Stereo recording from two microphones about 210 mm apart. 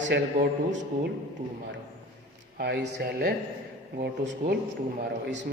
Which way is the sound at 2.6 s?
55° right (ahead or behind).